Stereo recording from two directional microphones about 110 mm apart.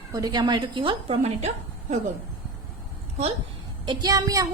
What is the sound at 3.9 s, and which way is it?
Speech, 40° right (ahead or behind).